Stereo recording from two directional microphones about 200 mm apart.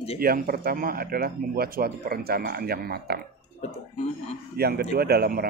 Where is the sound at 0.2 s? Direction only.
50° right (ahead or behind).